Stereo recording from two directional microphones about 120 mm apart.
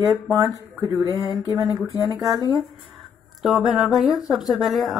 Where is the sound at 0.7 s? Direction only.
30° right (ahead or behind).